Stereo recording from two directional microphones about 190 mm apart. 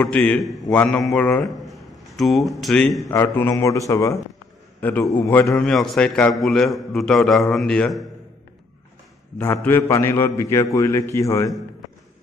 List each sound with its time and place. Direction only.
0.0 s a man's voice: 5° left (ahead or behind)
3.0 s a man's voice: 15° left (ahead or behind)
9.4 s a man's voice: 10° left (ahead or behind)